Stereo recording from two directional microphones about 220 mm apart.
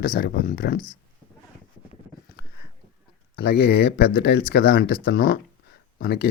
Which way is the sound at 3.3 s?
45° left (ahead or behind).